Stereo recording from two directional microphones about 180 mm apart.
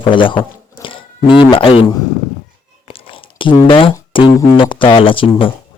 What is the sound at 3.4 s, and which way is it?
Speech, 25° left (ahead or behind).